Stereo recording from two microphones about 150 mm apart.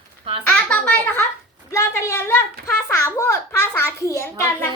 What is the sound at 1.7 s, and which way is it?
A child's voice, 20° left (ahead or behind).